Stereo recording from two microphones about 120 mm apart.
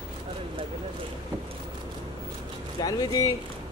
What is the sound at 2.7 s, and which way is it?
Speech, 30° left (ahead or behind).